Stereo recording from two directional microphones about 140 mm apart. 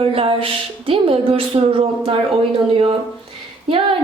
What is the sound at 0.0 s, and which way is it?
Speech, 40° right (ahead or behind).